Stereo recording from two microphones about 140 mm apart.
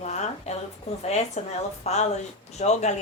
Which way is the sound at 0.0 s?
55° left (ahead or behind).